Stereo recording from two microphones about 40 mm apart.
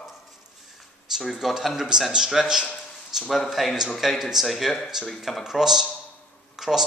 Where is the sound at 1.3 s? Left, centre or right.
Centre.